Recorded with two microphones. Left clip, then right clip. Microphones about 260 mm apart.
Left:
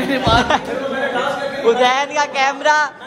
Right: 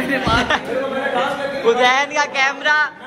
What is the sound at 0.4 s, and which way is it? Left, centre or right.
Speech, centre.